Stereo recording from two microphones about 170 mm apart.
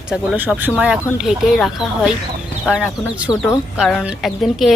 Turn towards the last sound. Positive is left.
turn(degrees=0)  # may be behind; listen again after turning